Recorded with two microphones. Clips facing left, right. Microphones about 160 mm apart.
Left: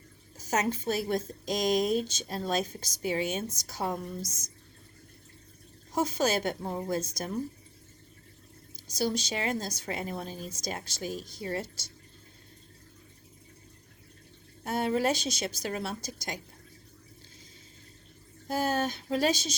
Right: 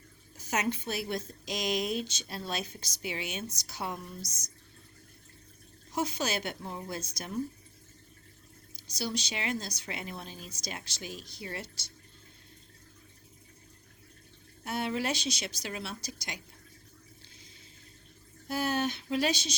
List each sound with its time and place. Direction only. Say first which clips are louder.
0.3 s a woman's voice: left 3 dB; 40° left (ahead or behind)
4.2 s speech: left 5 dB; 90° left
5.9 s speech: left 5 dB; 45° left (ahead or behind)
9.0 s speech: left 5 dB; 45° left (ahead or behind)
14.6 s speech: left 5 dB; 45° left (ahead or behind)
18.4 s speech: left 2 dB; 45° left (ahead or behind)